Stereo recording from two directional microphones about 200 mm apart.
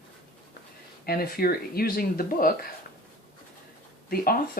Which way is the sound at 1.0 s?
50° left (ahead or behind).